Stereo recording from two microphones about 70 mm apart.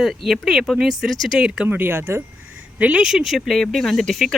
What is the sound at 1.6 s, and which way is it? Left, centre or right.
Speech, right.